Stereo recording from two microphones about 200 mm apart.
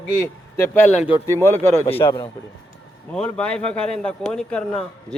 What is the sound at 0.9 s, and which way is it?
Speech, 35° left (ahead or behind).